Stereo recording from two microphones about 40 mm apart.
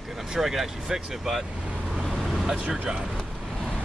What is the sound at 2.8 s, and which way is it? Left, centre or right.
Speech, right.